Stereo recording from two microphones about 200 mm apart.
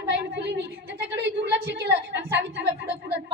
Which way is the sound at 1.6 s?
55° right (ahead or behind).